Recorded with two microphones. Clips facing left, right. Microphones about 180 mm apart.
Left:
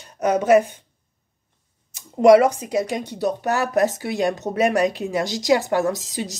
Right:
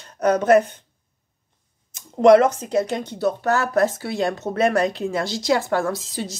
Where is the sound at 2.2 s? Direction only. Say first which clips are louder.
Even; 10° left (ahead or behind).